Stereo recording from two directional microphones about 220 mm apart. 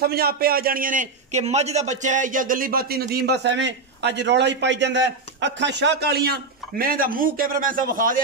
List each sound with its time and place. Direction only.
0.0 s a man's voice: 45° right (ahead or behind)